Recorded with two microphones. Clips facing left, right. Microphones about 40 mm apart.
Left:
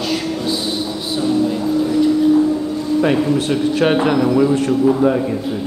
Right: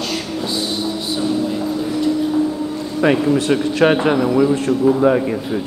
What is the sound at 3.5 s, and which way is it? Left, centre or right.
Speech, centre.